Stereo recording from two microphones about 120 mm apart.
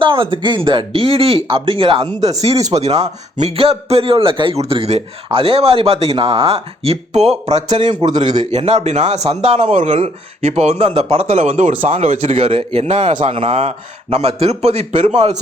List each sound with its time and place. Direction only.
0.0 s a man's voice: 45° right (ahead or behind)
2.7 s a man's voice: 60° right (ahead or behind)
13.3 s a man's voice: 50° right (ahead or behind)